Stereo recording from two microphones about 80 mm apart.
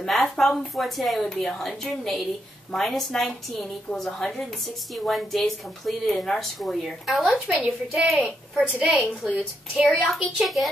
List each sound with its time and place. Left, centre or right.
0.0 s speech: centre
8.2 s a woman's voice: centre